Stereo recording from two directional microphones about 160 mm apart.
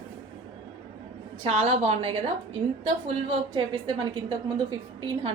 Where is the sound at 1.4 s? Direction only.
45° right (ahead or behind).